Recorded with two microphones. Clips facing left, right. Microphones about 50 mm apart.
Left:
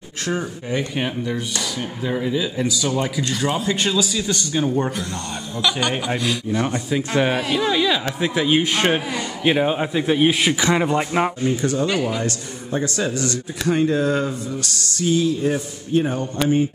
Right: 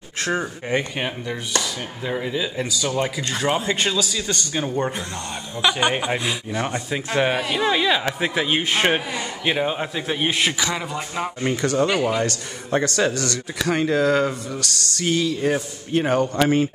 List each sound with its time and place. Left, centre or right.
0.9 s speech: centre
3.3 s speech: right
3.7 s speech: centre
5.6 s speech: right; by 7.6 s centre
7.6 s speech: centre
9.4 s speech: centre
10.5 s a man's voice: left
11.4 s speech: right
11.9 s speech: centre
12.2 s a man's voice: right